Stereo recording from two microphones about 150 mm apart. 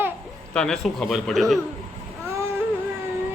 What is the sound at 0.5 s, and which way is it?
Speech, 5° left (ahead or behind).